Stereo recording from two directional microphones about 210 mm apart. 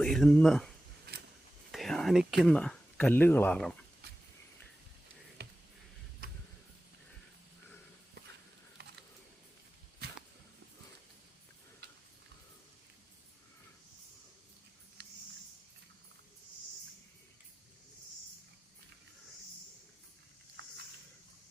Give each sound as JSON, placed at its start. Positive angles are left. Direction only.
{"t": 0.0, "sound": "speech", "side_deg": 0}
{"t": 1.7, "sound": "speech", "side_deg": 0}
{"t": 5.4, "sound": "a sound", "side_deg": -50}